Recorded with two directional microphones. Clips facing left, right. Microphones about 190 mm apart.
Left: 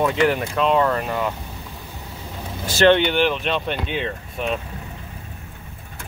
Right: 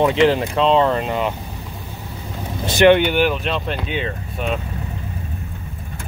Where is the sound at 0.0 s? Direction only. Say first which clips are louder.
Right 4 dB; 25° right (ahead or behind).